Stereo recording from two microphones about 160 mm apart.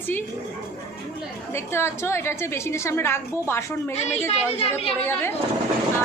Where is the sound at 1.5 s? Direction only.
15° left (ahead or behind).